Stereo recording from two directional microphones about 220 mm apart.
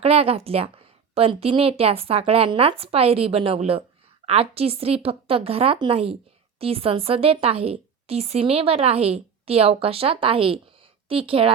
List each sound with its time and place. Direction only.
0.0 s a woman's voice: 25° right (ahead or behind)